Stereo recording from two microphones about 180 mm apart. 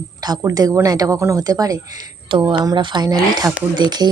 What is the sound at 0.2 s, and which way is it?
A woman's voice, 20° right (ahead or behind).